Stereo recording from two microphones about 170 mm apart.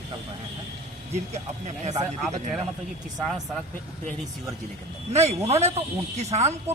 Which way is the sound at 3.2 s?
Centre (ahead or behind).